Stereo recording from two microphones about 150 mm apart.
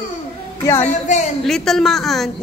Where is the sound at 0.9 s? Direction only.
50° left (ahead or behind).